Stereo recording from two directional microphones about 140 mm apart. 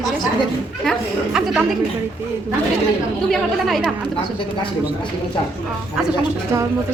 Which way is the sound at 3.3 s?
Centre (ahead or behind).